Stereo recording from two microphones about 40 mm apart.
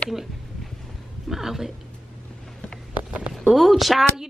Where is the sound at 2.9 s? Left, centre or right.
Right.